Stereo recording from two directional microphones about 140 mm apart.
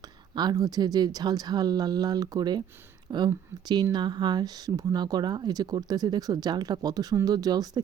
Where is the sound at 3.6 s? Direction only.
30° right (ahead or behind).